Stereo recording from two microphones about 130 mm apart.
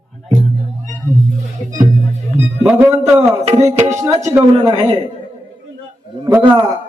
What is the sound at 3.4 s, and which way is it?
Speech, 60° right (ahead or behind).